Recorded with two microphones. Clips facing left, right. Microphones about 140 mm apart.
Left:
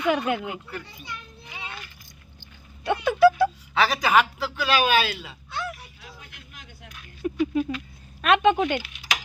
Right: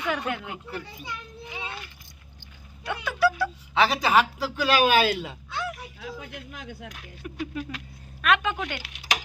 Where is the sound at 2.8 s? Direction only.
25° left (ahead or behind).